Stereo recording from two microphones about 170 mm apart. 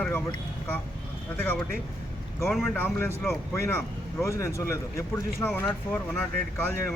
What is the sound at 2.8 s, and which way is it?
Speech, 15° left (ahead or behind).